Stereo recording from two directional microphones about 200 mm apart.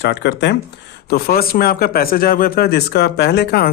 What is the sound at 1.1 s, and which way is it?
A man's voice, 50° left (ahead or behind).